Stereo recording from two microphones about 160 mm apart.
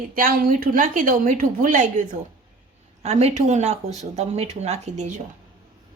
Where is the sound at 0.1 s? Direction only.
65° right (ahead or behind).